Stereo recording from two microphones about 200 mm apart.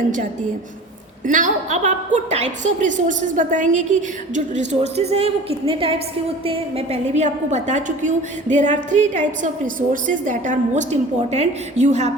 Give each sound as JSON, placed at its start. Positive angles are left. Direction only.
{"t": 1.2, "sound": "a woman's voice", "side_deg": -40}